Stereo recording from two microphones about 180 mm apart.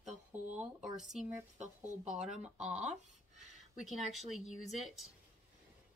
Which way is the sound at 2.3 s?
40° right (ahead or behind).